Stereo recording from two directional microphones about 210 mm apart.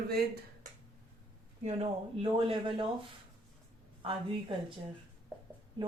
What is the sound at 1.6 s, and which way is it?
Speech, 25° right (ahead or behind).